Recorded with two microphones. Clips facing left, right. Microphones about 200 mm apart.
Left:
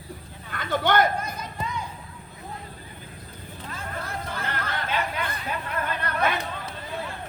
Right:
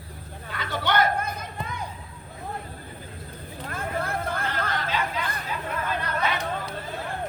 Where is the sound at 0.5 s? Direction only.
50° left (ahead or behind).